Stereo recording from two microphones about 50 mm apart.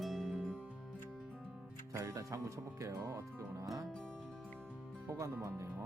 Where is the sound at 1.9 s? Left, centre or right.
Right.